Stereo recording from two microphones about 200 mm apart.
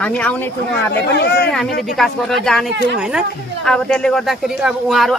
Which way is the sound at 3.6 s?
5° left (ahead or behind).